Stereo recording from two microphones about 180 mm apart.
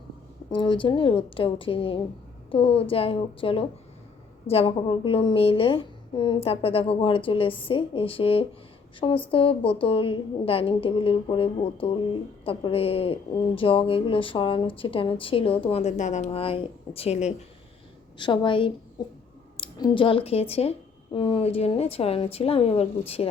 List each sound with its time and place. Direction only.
0.5 s a woman's voice: 25° left (ahead or behind)